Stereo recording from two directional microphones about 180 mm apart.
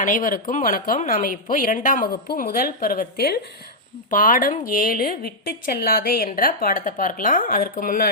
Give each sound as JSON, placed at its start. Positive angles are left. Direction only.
{"t": 0.0, "sound": "speech", "side_deg": 50}
{"t": 4.1, "sound": "speech", "side_deg": 50}